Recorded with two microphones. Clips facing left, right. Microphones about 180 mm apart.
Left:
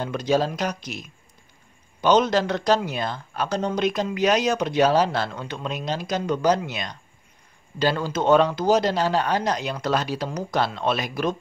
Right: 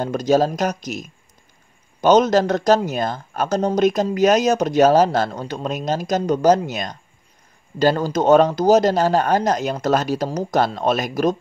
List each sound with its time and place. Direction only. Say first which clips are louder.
0.0 s a man's voice: right 5 dB; 40° right (ahead or behind)